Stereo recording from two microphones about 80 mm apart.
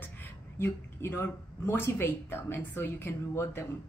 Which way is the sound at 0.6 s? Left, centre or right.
Left.